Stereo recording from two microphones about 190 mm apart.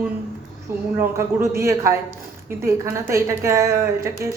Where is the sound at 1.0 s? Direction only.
15° right (ahead or behind).